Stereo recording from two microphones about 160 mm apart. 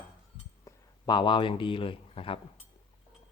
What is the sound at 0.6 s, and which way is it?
Speech, 25° left (ahead or behind).